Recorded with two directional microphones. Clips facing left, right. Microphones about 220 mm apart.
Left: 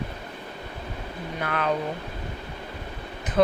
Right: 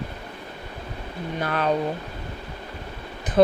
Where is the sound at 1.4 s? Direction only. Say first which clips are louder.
Right 3 dB; 35° right (ahead or behind).